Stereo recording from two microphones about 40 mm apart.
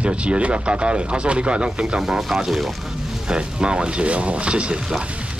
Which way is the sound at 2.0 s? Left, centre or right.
Centre.